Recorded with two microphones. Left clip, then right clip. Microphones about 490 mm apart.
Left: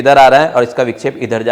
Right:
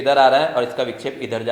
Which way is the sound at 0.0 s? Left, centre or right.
Left.